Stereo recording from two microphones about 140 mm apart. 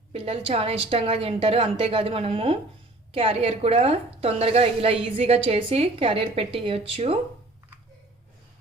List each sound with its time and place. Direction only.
0.1 s a woman's voice: 45° right (ahead or behind)